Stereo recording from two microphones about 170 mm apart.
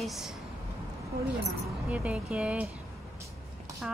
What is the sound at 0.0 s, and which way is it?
Speech, centre (ahead or behind).